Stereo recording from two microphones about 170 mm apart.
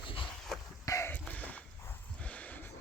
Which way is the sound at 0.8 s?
15° left (ahead or behind).